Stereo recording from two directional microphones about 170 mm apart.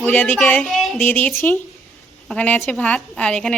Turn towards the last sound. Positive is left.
turn(degrees=5)  # may be behind; listen again after turning